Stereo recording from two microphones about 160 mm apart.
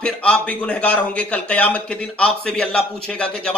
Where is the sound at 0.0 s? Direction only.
10° left (ahead or behind).